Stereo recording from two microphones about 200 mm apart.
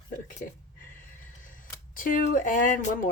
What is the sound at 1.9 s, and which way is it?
Speech, 45° left (ahead or behind).